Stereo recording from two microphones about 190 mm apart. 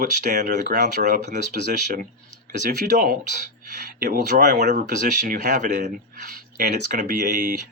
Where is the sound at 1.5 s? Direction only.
55° right (ahead or behind).